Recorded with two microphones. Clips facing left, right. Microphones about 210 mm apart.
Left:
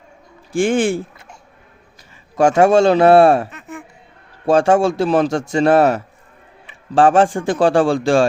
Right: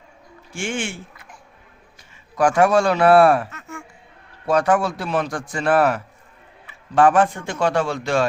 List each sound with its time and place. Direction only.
0.5 s speech: 35° left (ahead or behind)
2.4 s a man's voice: 25° left (ahead or behind)